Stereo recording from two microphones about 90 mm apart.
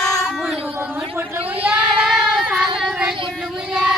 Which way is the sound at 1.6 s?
10° right (ahead or behind).